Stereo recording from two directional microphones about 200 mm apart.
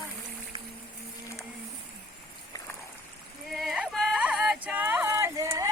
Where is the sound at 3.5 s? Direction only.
Centre (ahead or behind).